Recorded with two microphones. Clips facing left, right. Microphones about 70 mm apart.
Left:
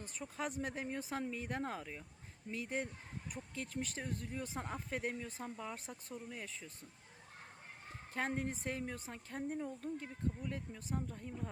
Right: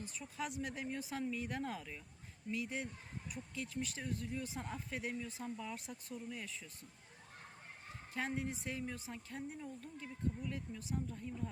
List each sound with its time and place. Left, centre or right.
0.0 s speech: left
8.1 s speech: left